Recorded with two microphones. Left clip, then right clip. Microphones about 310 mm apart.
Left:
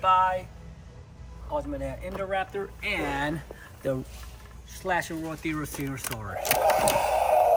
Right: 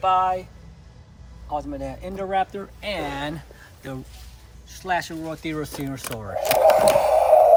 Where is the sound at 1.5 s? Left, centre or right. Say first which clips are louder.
Right 2 dB; centre.